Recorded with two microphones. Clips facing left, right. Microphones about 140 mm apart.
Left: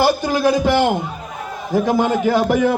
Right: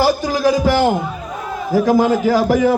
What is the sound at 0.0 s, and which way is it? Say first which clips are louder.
A man's voice: right 1 dB; 5° right (ahead or behind).